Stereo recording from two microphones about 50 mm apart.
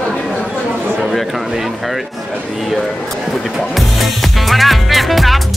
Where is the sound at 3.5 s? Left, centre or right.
Centre.